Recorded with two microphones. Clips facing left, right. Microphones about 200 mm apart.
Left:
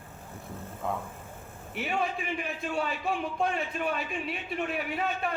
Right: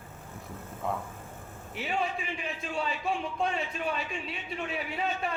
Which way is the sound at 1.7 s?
55° left (ahead or behind).